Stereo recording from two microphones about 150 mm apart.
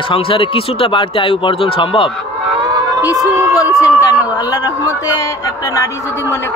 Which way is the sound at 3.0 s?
25° left (ahead or behind).